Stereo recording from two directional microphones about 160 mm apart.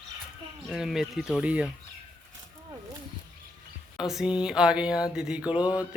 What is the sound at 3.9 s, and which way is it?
Speech, 5° right (ahead or behind).